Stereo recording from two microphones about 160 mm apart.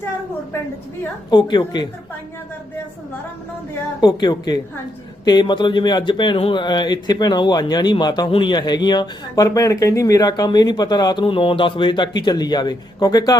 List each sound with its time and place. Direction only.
1.3 s speech: 25° left (ahead or behind)
4.0 s speech: 25° left (ahead or behind)